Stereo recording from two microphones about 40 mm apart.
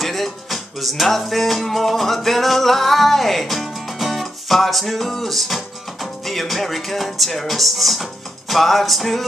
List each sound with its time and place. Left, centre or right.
0.0 s music: centre